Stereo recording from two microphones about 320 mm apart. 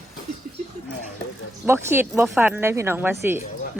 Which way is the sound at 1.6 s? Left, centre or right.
Centre.